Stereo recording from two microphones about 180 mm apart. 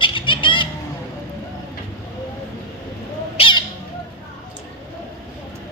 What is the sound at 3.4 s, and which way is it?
Bird, 25° left (ahead or behind).